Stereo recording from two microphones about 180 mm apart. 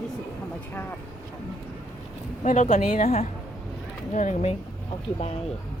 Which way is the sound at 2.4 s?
40° left (ahead or behind).